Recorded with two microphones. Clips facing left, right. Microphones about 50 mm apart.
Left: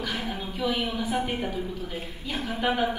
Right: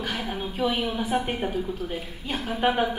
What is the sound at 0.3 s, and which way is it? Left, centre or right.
A woman's voice, right.